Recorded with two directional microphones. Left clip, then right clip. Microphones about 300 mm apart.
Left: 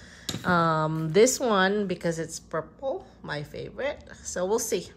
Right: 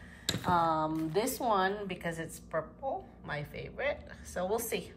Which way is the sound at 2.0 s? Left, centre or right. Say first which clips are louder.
Left 8 dB; centre.